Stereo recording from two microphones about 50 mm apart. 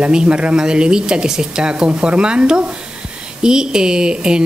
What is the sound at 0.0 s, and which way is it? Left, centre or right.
Speech, centre.